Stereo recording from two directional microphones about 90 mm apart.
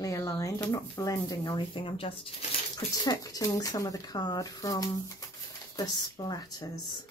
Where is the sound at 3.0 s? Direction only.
40° left (ahead or behind).